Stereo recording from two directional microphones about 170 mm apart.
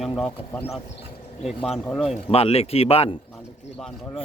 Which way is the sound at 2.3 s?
35° left (ahead or behind).